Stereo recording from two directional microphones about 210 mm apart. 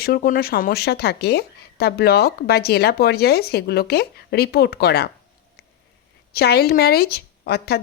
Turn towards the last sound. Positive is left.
turn(degrees=50)  # may be behind; listen again after turning